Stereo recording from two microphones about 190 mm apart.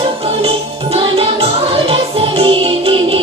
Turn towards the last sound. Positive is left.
turn(degrees=-30)  # may be behind; listen again after turning